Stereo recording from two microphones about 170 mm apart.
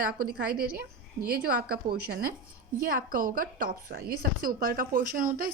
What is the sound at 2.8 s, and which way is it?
A woman's voice, 55° right (ahead or behind).